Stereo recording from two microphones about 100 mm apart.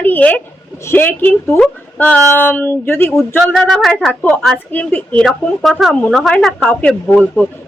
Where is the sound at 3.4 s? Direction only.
5° left (ahead or behind).